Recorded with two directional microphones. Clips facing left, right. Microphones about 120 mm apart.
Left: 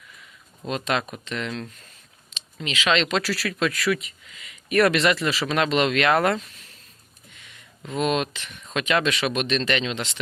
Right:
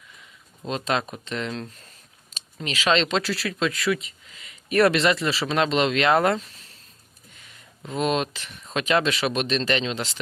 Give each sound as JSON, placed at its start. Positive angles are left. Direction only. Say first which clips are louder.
{"t": 0.7, "sound": "speech", "louder": "even", "side_deg": -30}
{"t": 7.9, "sound": "speech", "louder": "even", "side_deg": -30}